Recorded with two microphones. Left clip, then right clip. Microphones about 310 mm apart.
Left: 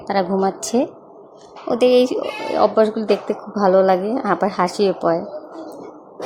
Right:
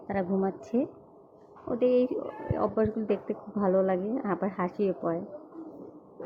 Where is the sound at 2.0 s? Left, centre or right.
Left.